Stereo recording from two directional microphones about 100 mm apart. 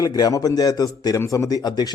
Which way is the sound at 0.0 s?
40° left (ahead or behind).